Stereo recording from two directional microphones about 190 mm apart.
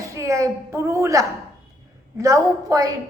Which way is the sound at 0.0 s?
15° right (ahead or behind).